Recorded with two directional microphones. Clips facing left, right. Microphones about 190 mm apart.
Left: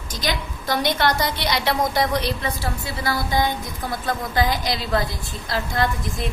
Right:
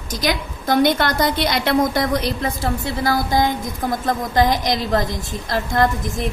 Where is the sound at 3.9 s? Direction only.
45° right (ahead or behind).